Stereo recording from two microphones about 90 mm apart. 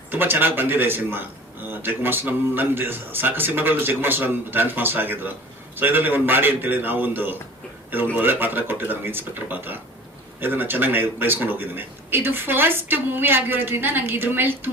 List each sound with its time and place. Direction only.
0.1 s a man's voice: 25° right (ahead or behind)